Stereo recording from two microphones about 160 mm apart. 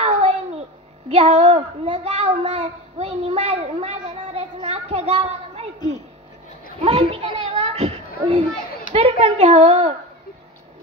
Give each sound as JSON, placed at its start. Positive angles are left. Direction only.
{"t": 0.0, "sound": "a sound", "side_deg": -40}
{"t": 1.1, "sound": "a child's voice", "side_deg": -40}
{"t": 6.8, "sound": "children playing", "side_deg": -35}
{"t": 8.9, "sound": "a child's voice", "side_deg": -40}